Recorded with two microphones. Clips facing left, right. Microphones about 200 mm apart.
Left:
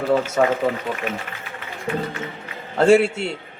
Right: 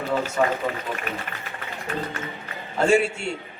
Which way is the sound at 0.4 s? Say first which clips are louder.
Left 3 dB; 60° left (ahead or behind).